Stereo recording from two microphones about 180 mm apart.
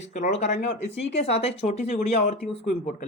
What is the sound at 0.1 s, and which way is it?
Speech, 40° left (ahead or behind).